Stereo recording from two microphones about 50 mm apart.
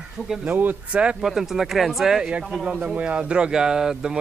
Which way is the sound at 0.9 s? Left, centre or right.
Right.